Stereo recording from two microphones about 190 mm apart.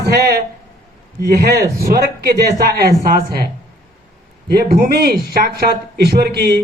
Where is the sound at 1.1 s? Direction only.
55° right (ahead or behind).